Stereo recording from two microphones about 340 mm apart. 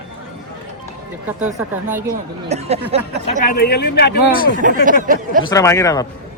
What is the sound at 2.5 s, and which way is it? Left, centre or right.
Speech, centre.